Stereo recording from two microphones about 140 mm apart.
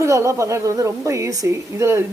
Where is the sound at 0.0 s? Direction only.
20° right (ahead or behind).